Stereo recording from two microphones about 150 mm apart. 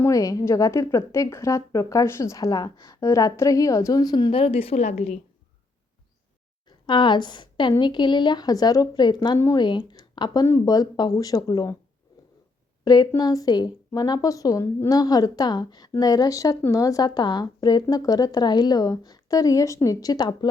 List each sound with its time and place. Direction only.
0.0 s a woman's voice: 20° left (ahead or behind); by 5.2 s 50° left (ahead or behind)
6.7 s a woman's voice: 30° left (ahead or behind)
12.8 s a woman's voice: 25° left (ahead or behind)